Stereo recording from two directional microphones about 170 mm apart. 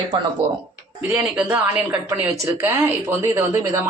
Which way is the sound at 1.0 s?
10° right (ahead or behind).